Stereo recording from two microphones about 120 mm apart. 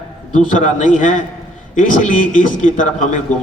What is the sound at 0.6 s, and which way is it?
Speech, 90° left.